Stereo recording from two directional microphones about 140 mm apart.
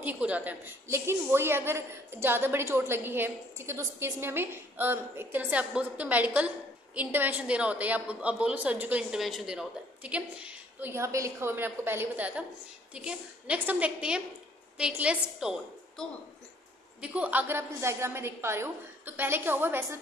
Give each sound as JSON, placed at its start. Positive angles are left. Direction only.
{"t": 0.0, "sound": "a woman's voice", "side_deg": -10}
{"t": 17.0, "sound": "a woman's voice", "side_deg": -10}